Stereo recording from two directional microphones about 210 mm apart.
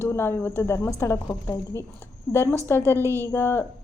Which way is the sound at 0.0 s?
10° left (ahead or behind).